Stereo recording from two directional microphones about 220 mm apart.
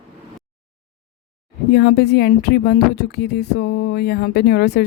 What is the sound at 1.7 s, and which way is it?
Speech, 50° left (ahead or behind).